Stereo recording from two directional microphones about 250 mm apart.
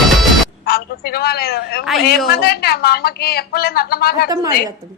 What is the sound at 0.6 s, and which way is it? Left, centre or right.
A man's voice, left.